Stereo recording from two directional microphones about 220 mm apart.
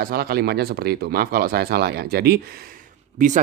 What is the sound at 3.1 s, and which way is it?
Speech, 35° right (ahead or behind).